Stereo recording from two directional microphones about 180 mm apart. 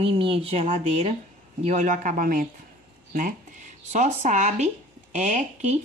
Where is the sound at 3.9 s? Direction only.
40° right (ahead or behind).